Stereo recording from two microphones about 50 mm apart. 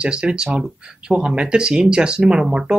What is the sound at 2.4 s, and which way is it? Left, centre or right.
Speech, centre.